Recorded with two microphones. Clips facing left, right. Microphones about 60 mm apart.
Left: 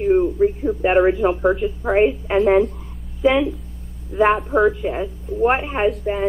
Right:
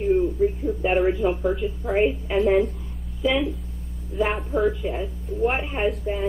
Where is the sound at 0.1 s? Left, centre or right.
Left.